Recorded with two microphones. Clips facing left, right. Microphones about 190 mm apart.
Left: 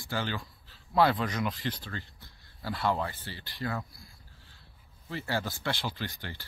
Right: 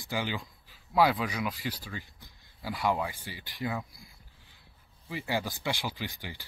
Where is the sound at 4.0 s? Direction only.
15° right (ahead or behind).